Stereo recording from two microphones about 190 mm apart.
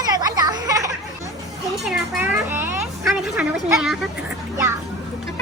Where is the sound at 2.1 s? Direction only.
10° right (ahead or behind).